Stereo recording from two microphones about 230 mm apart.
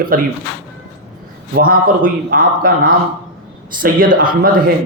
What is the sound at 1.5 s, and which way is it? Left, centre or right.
A man's voice, right.